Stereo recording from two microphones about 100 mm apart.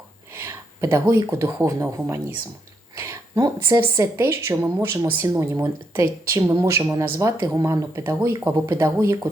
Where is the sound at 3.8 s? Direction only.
30° right (ahead or behind).